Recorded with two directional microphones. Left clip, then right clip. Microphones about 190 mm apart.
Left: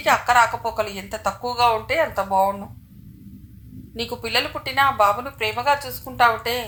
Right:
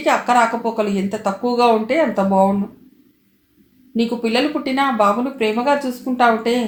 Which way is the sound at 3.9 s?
30° left (ahead or behind).